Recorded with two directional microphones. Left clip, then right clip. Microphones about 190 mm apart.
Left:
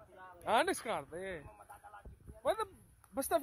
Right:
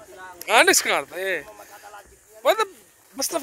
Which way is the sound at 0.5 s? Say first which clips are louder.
Right 16 dB; centre (ahead or behind).